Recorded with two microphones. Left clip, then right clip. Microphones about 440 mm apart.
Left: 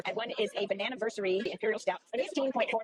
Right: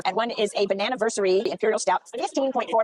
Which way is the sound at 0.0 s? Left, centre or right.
Right.